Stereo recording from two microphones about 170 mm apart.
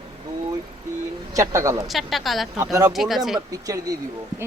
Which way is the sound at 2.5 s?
20° right (ahead or behind).